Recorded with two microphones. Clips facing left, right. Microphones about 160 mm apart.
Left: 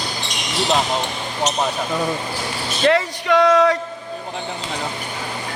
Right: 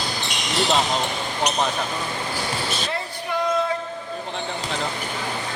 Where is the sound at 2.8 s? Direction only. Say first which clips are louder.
Left 11 dB; 80° left.